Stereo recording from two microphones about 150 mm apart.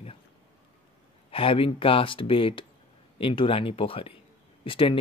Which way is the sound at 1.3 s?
35° left (ahead or behind).